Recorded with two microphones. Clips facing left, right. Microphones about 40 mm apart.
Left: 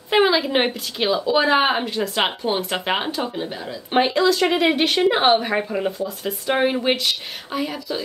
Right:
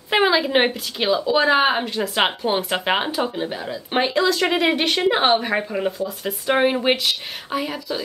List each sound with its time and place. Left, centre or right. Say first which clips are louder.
0.1 s speech: even; centre